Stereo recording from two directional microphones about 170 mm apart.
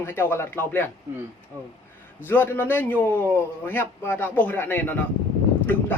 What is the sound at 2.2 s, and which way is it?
A man's voice, 10° left (ahead or behind).